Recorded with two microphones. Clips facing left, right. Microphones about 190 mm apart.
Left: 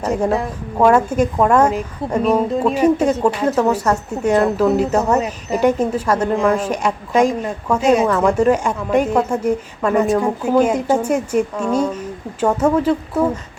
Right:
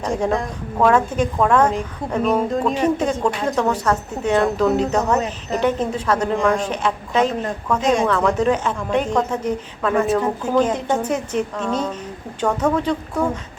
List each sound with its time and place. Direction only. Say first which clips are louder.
0.0 s a woman's voice: left 3 dB; 5° left (ahead or behind)